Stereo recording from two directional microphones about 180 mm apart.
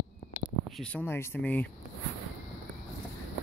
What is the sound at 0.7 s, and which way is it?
Speech, 5° left (ahead or behind).